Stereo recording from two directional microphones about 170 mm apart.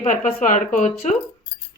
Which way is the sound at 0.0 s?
50° left (ahead or behind).